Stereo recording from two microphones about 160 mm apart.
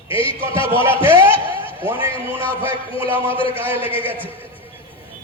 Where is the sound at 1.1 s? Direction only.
10° right (ahead or behind).